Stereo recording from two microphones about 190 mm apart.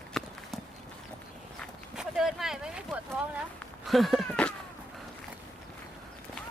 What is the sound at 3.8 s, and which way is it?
Cat, centre (ahead or behind).